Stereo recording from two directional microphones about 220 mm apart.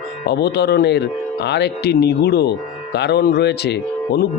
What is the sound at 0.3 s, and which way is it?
Speech, 50° left (ahead or behind).